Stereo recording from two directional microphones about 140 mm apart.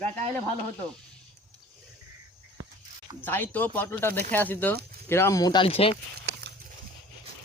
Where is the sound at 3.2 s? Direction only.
15° left (ahead or behind).